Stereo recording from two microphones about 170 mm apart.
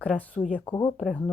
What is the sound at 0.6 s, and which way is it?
Speech, 25° left (ahead or behind).